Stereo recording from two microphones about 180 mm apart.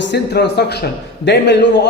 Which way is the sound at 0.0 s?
70° left (ahead or behind).